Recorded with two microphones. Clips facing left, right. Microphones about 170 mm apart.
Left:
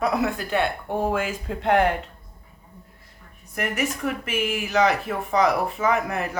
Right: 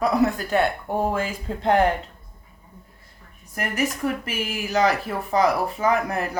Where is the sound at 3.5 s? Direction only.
35° right (ahead or behind).